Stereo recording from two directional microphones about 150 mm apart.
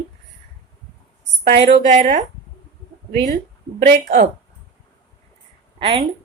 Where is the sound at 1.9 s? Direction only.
55° right (ahead or behind).